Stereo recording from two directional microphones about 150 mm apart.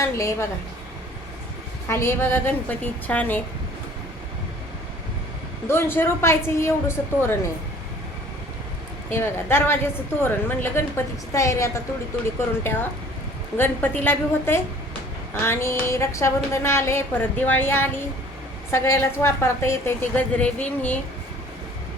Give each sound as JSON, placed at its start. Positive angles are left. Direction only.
{"t": 0.0, "sound": "a woman's voice", "side_deg": 20}
{"t": 1.9, "sound": "a woman's voice", "side_deg": 15}
{"t": 5.6, "sound": "a woman's voice", "side_deg": 15}
{"t": 9.0, "sound": "a woman's voice", "side_deg": 15}